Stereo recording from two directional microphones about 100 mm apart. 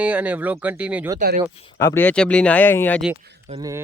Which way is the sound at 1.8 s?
25° left (ahead or behind).